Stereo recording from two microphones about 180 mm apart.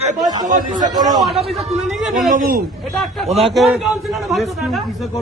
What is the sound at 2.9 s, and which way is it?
Speech, centre (ahead or behind).